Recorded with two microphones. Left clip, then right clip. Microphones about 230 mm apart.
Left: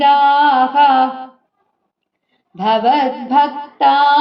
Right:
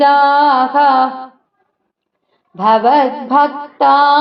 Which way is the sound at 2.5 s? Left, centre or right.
Right.